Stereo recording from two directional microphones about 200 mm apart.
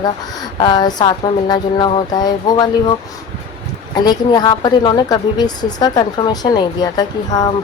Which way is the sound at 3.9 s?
20° left (ahead or behind).